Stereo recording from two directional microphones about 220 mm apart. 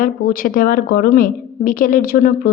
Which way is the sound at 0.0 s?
40° left (ahead or behind).